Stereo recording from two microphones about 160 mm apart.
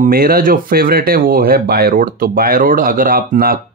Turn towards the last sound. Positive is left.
turn(degrees=-65)  # may be behind; listen again after turning